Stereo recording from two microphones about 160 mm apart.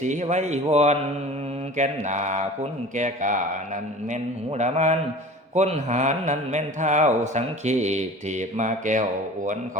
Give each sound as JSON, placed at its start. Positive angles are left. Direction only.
{"t": 0.0, "sound": "speech", "side_deg": -50}